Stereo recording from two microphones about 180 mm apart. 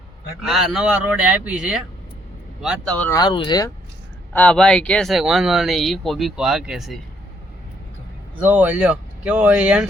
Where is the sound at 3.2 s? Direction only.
25° left (ahead or behind).